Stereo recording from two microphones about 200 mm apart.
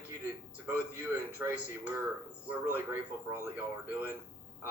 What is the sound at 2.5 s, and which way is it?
Speech, 10° right (ahead or behind).